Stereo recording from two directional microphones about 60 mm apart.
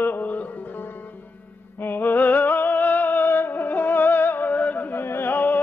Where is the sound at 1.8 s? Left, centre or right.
Left.